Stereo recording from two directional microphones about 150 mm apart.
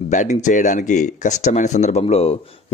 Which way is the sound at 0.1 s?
55° left (ahead or behind).